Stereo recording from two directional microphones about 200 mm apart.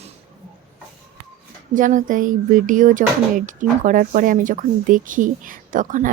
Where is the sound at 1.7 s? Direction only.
40° right (ahead or behind).